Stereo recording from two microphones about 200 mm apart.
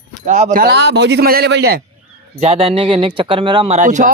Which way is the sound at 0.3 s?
35° right (ahead or behind).